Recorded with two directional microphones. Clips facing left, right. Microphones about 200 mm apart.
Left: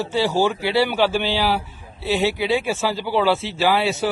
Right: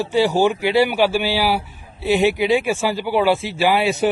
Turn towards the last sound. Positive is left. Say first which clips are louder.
# right 2 dB
turn(degrees=-15)  # may be behind; listen again after turning